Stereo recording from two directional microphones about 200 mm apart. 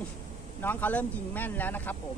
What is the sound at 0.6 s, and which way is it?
Speech, 10° left (ahead or behind).